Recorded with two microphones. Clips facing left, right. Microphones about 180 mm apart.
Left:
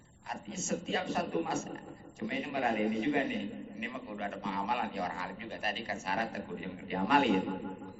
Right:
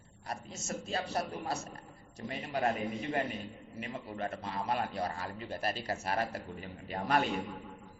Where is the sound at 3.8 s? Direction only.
40° right (ahead or behind).